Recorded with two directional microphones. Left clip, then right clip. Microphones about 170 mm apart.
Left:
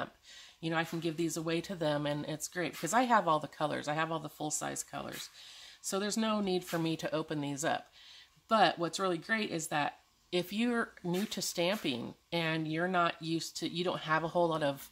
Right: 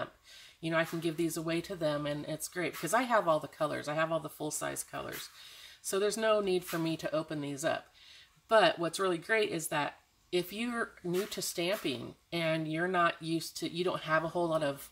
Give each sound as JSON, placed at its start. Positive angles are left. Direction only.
{"t": 0.6, "sound": "speech", "side_deg": 40}